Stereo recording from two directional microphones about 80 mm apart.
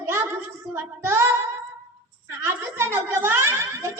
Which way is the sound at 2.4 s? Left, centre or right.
Right.